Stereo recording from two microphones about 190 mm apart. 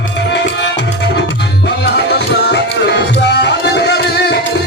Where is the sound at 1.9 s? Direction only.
65° left (ahead or behind).